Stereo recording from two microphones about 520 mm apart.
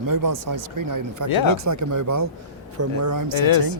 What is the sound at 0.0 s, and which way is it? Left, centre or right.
Speech, right.